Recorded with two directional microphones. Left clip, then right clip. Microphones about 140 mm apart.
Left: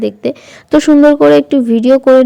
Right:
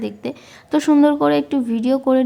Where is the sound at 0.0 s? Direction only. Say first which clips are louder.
Left 11 dB; 35° left (ahead or behind).